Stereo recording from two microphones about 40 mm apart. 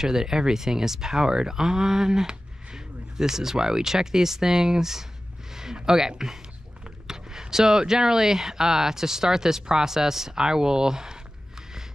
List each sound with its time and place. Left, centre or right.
0.0 s speech: centre
5.5 s a sound: centre
5.9 s speech: centre